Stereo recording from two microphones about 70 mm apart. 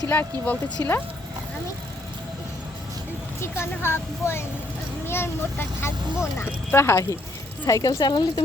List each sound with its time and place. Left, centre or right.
0.1 s speech: left
3.6 s a child's voice: left
7.7 s a woman's voice: left